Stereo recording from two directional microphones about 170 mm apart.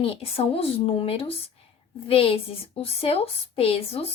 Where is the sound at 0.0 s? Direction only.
35° left (ahead or behind).